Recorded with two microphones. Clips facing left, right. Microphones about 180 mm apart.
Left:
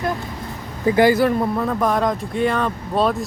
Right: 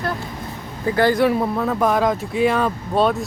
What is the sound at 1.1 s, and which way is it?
Speech, centre (ahead or behind).